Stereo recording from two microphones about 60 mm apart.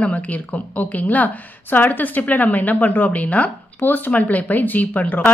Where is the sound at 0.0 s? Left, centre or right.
Left.